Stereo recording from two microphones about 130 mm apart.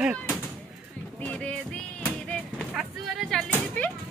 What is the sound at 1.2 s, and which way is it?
Music, 10° left (ahead or behind).